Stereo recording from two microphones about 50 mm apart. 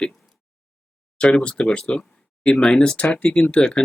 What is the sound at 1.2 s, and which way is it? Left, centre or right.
Speech, left.